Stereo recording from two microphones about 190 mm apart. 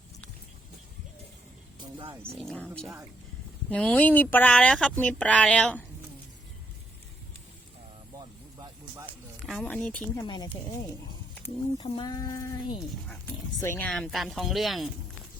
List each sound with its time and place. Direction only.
2.3 s speech: centre (ahead or behind)
9.0 s speech: 5° left (ahead or behind)
10.2 s speech: 20° left (ahead or behind)
11.8 s speech: 20° left (ahead or behind); by 14.8 s centre (ahead or behind)